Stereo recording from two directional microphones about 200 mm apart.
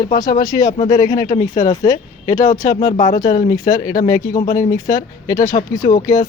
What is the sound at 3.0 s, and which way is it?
Speech, 40° left (ahead or behind).